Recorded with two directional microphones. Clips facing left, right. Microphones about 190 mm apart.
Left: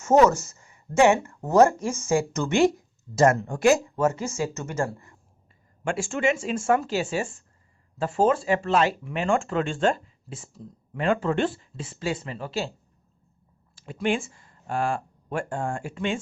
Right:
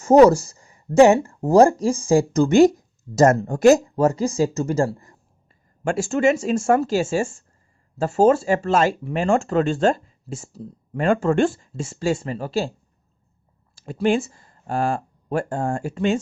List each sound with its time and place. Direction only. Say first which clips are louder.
0.0 s speech: right 6 dB; 35° right (ahead or behind)
13.7 s speech: right 6 dB; 40° right (ahead or behind)